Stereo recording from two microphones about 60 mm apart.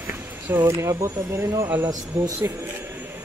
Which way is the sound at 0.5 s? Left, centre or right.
Right.